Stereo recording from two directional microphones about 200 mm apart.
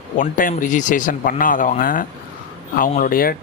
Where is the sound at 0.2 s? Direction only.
40° left (ahead or behind).